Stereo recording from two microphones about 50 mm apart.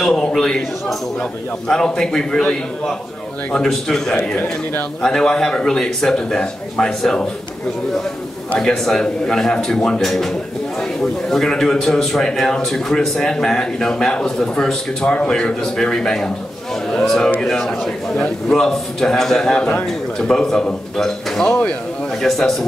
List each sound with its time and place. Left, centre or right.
0.0 s a man's voice: centre
8.5 s a man's voice: centre
21.5 s speech: left